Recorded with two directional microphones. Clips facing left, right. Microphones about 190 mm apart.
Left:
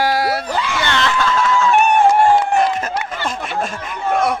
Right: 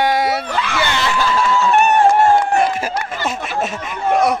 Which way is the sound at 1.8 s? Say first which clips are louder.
Even; 15° left (ahead or behind).